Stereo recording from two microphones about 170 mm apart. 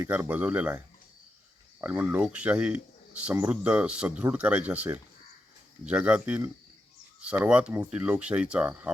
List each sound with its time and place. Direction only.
0.0 s speech: 10° right (ahead or behind)
1.8 s speech: 10° right (ahead or behind)